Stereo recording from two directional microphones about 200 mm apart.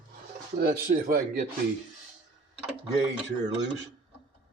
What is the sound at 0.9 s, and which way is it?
Speech, 45° right (ahead or behind).